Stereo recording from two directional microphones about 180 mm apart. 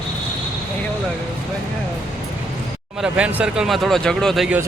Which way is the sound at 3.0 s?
5° right (ahead or behind).